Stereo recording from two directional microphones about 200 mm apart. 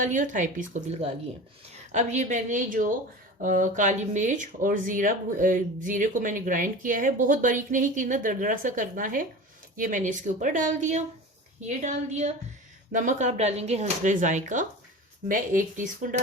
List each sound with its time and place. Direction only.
0.0 s speech: 40° right (ahead or behind)